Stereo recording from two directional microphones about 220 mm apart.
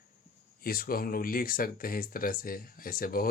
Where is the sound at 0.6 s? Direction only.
40° left (ahead or behind).